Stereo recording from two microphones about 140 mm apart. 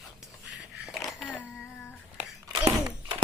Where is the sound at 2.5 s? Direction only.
25° right (ahead or behind).